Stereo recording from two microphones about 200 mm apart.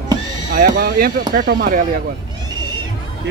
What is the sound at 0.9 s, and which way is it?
Speech, 45° right (ahead or behind).